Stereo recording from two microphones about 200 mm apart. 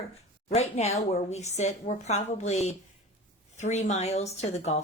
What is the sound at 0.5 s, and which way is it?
Speech, 30° left (ahead or behind).